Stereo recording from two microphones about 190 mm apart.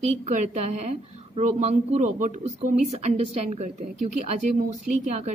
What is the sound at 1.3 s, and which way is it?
Speech, 35° right (ahead or behind).